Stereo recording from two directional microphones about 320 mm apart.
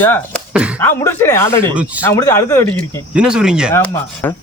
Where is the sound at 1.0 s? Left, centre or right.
Centre.